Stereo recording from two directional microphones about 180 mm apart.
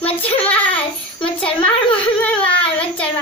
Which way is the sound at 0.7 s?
30° left (ahead or behind).